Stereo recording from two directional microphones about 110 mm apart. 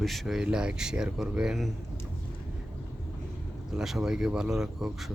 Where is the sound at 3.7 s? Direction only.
5° right (ahead or behind).